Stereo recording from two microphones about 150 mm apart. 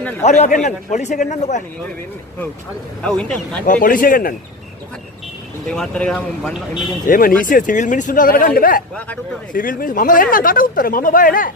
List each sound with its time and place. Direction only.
0.2 s a man's voice: 50° left (ahead or behind)
3.0 s speech: 5° left (ahead or behind)
3.6 s speech: 65° left (ahead or behind)
5.7 s speech: 5° left (ahead or behind)
7.1 s speech: 75° left (ahead or behind)